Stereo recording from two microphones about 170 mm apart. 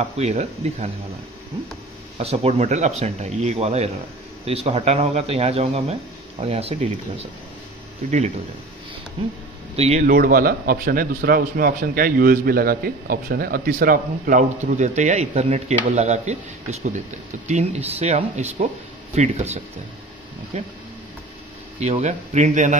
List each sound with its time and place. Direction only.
0.0 s speech: 40° right (ahead or behind)
2.1 s speech: 40° right (ahead or behind)
9.8 s speech: 40° right (ahead or behind)
10.0 s a man's voice: 55° right (ahead or behind); by 16.3 s 40° right (ahead or behind)
17.5 s speech: 40° right (ahead or behind)
21.7 s speech: 40° right (ahead or behind)